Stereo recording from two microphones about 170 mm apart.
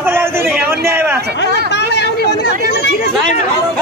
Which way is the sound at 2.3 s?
70° left (ahead or behind).